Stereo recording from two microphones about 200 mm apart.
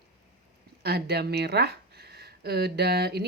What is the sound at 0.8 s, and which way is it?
Speech, 55° right (ahead or behind).